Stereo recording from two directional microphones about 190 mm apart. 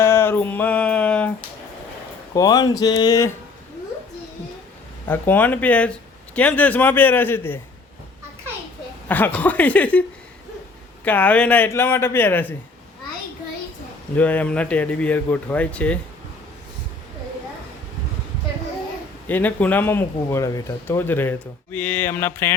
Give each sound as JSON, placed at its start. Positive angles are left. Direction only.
{"t": 0.0, "sound": "a sound", "side_deg": 15}
{"t": 2.3, "sound": "speech", "side_deg": 20}
{"t": 5.0, "sound": "speech", "side_deg": 10}
{"t": 9.0, "sound": "speech", "side_deg": 10}
{"t": 11.0, "sound": "speech", "side_deg": 10}
{"t": 14.2, "sound": "speech", "side_deg": 5}
{"t": 19.3, "sound": "speech", "side_deg": 10}